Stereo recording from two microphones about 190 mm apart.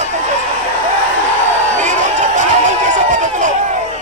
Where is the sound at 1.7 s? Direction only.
40° right (ahead or behind).